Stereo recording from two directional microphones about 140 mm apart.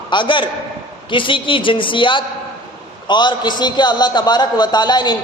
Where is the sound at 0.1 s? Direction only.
35° left (ahead or behind).